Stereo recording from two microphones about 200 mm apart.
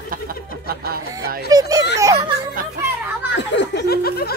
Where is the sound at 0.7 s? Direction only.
50° right (ahead or behind).